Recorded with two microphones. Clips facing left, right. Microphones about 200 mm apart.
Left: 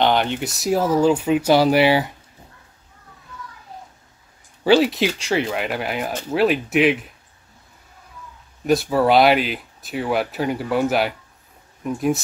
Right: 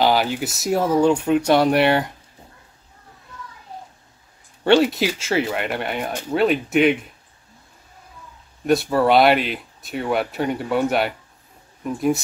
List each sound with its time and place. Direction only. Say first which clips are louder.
0.0 s speech: even; 5° right (ahead or behind)
4.6 s speech: even; centre (ahead or behind)
8.6 s speech: even; centre (ahead or behind)